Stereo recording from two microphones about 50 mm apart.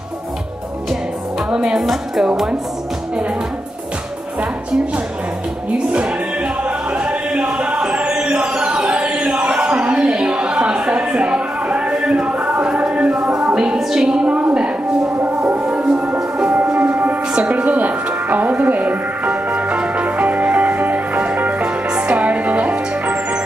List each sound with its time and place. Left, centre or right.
1.5 s speech: centre
5.9 s music: right
9.5 s a sound: centre
13.2 s music: centre
13.7 s a sound: centre
15.1 s music: right